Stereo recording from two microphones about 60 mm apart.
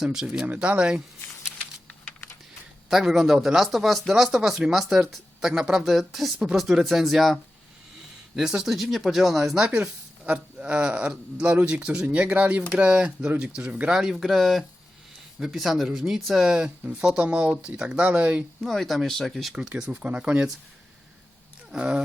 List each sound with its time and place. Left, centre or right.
0.0 s speech: centre
0.4 s speech: right
2.9 s speech: centre
8.4 s speech: centre
13.9 s speech: centre
16.5 s speech: centre
18.6 s speech: centre
19.5 s speech: centre
19.9 s speech: right
21.7 s speech: centre